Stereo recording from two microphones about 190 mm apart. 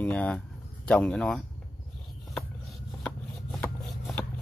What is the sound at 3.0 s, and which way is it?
Shuffling cards, 5° left (ahead or behind).